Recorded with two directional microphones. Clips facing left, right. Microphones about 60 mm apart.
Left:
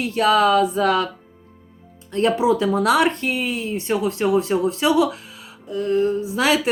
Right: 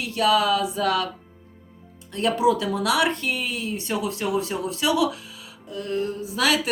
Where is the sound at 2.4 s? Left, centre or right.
Left.